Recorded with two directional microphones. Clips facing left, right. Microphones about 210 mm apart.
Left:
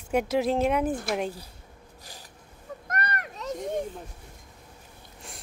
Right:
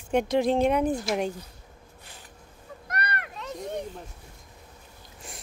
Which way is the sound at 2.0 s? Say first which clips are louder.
Left 1 dB; 35° left (ahead or behind).